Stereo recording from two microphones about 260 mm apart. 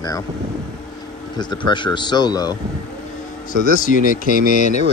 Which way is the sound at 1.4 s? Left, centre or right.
Centre.